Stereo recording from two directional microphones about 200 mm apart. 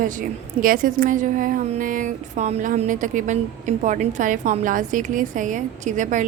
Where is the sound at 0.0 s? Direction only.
45° right (ahead or behind).